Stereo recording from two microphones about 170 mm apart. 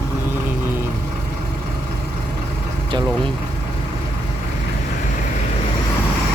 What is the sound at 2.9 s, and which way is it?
Speech, 25° right (ahead or behind).